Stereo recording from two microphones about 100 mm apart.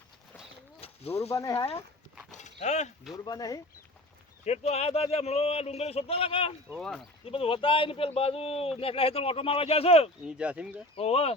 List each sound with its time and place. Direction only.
0.8 s a sound: 80° left
1.3 s speech: 35° left (ahead or behind)
1.5 s speech: 75° left (ahead or behind)
3.2 s speech: 40° left (ahead or behind)
4.4 s a man's voice: 90° left; by 6.5 s 70° left (ahead or behind)
6.7 s speech: 5° left (ahead or behind)
7.3 s speech: 70° left (ahead or behind)
10.2 s speech: 10° right (ahead or behind)
10.9 s a man's voice: 90° left